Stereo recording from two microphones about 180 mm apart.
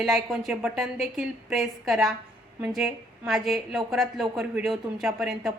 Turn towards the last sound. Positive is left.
turn(degrees=0)  # may be behind; listen again after turning